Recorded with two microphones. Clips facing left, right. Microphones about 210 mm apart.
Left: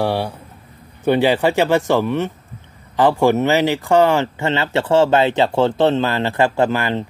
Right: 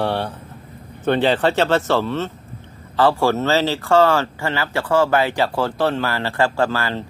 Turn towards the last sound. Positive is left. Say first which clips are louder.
# left 3 dB
turn(degrees=20)  # may be behind; listen again after turning